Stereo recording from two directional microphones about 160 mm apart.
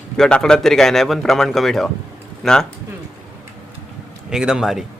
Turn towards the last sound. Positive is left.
turn(degrees=-5)  # may be behind; listen again after turning